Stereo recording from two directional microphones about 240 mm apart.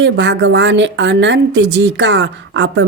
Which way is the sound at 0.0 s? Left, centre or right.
Right.